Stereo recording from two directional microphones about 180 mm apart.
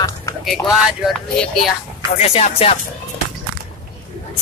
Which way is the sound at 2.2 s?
35° left (ahead or behind).